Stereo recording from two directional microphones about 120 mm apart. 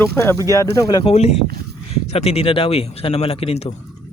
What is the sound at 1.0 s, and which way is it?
Speech, 60° left (ahead or behind).